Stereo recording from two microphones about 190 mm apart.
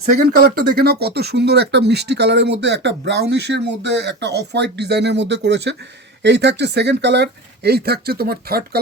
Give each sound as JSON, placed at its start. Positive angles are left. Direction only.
{"t": 0.2, "sound": "speech", "side_deg": -55}